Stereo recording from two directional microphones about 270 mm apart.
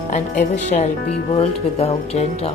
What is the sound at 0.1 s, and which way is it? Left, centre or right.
A woman's voice, left.